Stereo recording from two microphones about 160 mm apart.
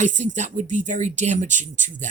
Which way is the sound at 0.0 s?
50° right (ahead or behind).